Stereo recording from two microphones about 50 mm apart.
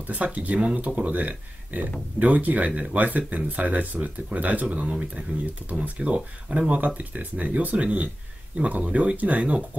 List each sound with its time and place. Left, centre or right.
0.0 s speech: right